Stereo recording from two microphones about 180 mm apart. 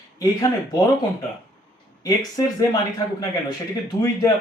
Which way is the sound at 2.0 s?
20° left (ahead or behind).